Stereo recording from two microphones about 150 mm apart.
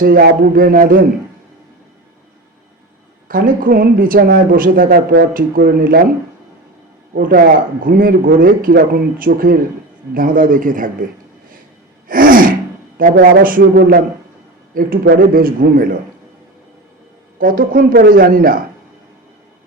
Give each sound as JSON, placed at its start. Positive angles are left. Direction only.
{"t": 0.0, "sound": "speech", "side_deg": -75}
{"t": 3.2, "sound": "speech", "side_deg": -70}
{"t": 7.2, "sound": "a man's voice", "side_deg": -75}
{"t": 12.0, "sound": "gasp", "side_deg": -70}
{"t": 13.0, "sound": "speech", "side_deg": -70}
{"t": 14.8, "sound": "speech", "side_deg": -70}
{"t": 17.3, "sound": "speech", "side_deg": -70}